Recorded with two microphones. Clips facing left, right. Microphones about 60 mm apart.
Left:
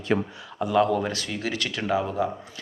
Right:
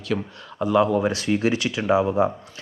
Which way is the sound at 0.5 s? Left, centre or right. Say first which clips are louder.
Right 2 dB; centre.